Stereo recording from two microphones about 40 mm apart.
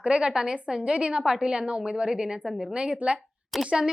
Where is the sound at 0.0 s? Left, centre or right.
Right.